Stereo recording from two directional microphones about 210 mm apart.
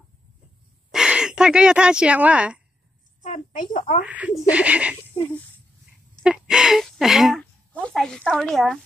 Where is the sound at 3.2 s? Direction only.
40° left (ahead or behind).